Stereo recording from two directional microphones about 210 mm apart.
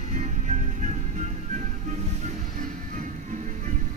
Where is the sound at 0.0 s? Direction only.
35° right (ahead or behind).